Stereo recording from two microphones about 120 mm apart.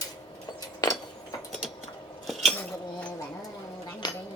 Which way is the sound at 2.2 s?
Centre (ahead or behind).